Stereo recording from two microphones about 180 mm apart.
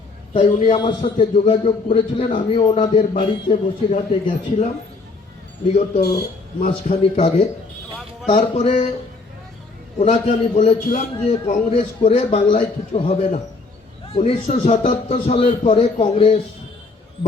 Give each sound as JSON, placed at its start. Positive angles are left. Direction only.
{"t": 0.5, "sound": "a man's voice", "side_deg": 45}
{"t": 0.8, "sound": "a man's voice", "side_deg": 25}
{"t": 6.0, "sound": "speech", "side_deg": 65}
{"t": 6.6, "sound": "a man's voice", "side_deg": 40}
{"t": 10.0, "sound": "a man's voice", "side_deg": 40}